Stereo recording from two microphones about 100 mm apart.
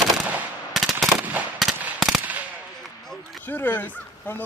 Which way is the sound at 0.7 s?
5° right (ahead or behind).